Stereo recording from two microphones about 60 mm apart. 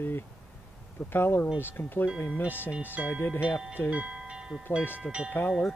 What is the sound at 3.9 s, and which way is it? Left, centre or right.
Train, right.